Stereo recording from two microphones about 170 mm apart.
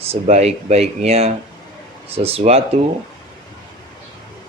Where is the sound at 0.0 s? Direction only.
40° right (ahead or behind).